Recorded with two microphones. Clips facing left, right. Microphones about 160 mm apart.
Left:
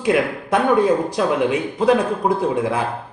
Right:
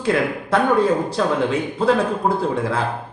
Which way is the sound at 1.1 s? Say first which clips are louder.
Left 1 dB; 15° left (ahead or behind).